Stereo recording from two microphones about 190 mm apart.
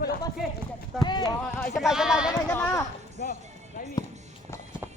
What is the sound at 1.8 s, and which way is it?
Speech, 5° right (ahead or behind).